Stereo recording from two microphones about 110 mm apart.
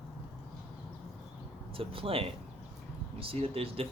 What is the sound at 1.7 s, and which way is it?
Speech, 55° right (ahead or behind).